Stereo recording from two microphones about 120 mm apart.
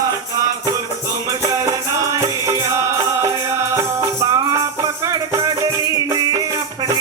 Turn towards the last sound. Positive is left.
turn(degrees=-30)  # may be behind; listen again after turning